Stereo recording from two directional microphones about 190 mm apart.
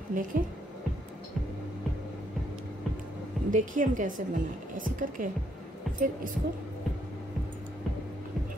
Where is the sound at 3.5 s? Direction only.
45° right (ahead or behind).